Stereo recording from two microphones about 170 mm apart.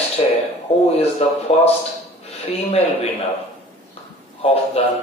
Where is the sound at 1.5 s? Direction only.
40° left (ahead or behind).